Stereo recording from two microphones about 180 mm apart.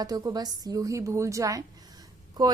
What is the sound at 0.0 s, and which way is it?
A woman's voice, 20° right (ahead or behind).